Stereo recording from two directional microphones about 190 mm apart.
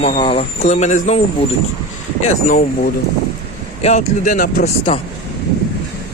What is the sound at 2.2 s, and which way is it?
Speech, 40° left (ahead or behind).